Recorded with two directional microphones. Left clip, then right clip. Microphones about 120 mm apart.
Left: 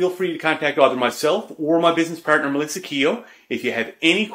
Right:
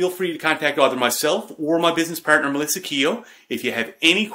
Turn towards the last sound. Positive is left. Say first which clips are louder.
# right 1 dB
turn(degrees=-25)  # may be behind; listen again after turning